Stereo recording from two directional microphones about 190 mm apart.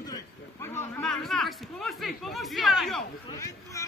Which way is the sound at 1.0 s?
Centre (ahead or behind).